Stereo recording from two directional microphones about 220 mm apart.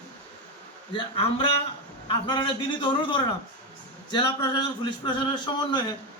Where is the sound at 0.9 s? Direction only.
25° left (ahead or behind).